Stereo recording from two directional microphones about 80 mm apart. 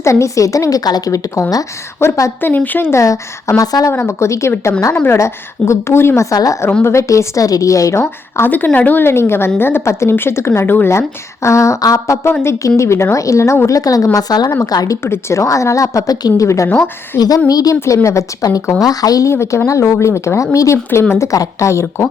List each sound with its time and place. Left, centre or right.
0.0 s a woman's voice: left
2.0 s speech: left
2.4 s a woman's voice: left
3.0 s a woman's voice: left
3.9 s speech: left
6.3 s a woman's voice: left
6.8 s a woman's voice: left
8.4 s a woman's voice: left
12.3 s a woman's voice: left
15.0 s speech: left
16.6 s a woman's voice: left
17.2 s a woman's voice: left
17.7 s a woman's voice: left
19.3 s speech: left